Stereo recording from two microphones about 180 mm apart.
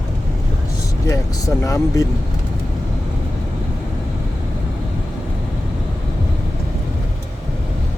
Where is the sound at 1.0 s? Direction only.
20° left (ahead or behind).